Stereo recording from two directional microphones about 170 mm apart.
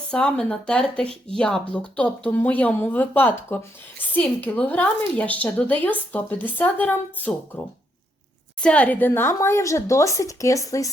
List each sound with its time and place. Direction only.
0.1 s a woman's voice: 5° left (ahead or behind)
8.6 s a woman's voice: 10° left (ahead or behind)